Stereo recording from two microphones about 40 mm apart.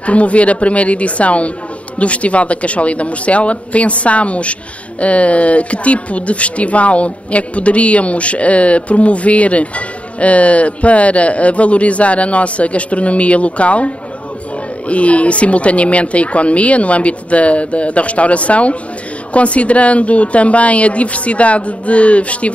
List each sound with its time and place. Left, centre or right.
0.0 s speech: left